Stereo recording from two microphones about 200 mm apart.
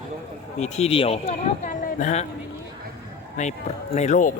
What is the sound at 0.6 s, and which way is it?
Speech, 30° left (ahead or behind).